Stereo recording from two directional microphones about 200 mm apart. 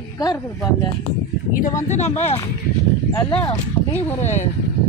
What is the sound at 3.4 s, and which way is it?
Speech, 35° left (ahead or behind).